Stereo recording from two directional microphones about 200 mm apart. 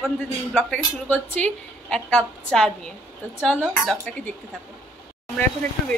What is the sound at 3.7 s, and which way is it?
Speech, 5° left (ahead or behind).